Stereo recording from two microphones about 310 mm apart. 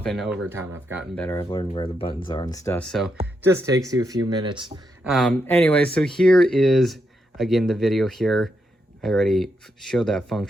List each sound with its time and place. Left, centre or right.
0.0 s speech: centre
1.1 s speech: centre
3.4 s speech: centre
5.0 s speech: centre